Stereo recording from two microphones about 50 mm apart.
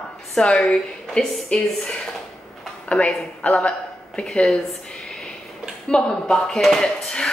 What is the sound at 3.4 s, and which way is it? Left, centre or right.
Speech, left.